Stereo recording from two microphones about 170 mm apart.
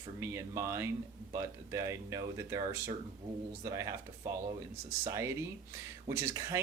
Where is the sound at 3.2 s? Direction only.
30° right (ahead or behind).